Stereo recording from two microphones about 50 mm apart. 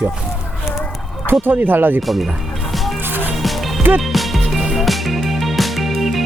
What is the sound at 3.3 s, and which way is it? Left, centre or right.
Music, centre.